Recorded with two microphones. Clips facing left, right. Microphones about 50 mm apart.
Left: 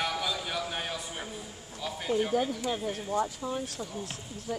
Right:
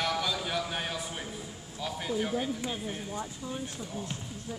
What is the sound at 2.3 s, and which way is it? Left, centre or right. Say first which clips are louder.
Speech: left 4 dB; left.